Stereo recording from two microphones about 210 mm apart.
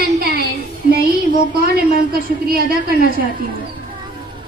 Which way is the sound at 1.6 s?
45° right (ahead or behind).